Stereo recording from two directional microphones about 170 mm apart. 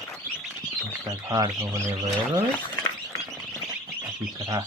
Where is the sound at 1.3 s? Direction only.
20° right (ahead or behind).